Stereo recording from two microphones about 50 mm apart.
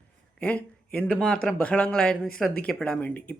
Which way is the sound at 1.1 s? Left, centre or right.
Centre.